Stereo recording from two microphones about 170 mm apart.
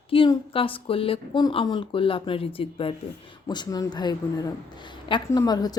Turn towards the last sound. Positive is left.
turn(degrees=25)  # may be behind; listen again after turning